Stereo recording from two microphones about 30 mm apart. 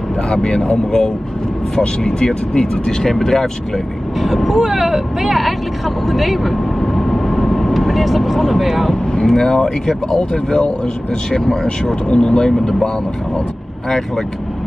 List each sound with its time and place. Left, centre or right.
0.3 s speech: left
4.2 s speech: centre
6.0 s vehicle: centre
9.1 s speech: centre
10.1 s speech: left
11.8 s speech: left
13.8 s speech: centre